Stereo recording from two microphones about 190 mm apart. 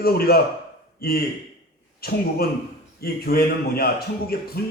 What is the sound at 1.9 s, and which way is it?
A man's voice, 55° left (ahead or behind).